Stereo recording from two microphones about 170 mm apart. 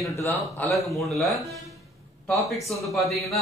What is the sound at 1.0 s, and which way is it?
Speech, centre (ahead or behind).